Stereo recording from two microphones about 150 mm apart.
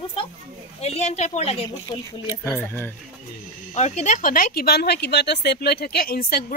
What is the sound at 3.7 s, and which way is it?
Speech, 50° left (ahead or behind).